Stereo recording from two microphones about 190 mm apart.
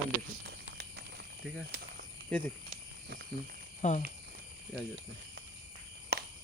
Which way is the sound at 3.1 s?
60° right (ahead or behind).